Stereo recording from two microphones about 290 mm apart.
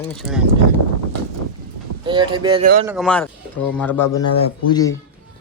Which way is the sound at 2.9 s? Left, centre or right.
Centre.